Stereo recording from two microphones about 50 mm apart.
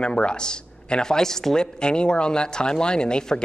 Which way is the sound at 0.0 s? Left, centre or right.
Centre.